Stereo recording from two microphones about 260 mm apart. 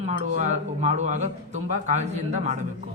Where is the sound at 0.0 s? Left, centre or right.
Right.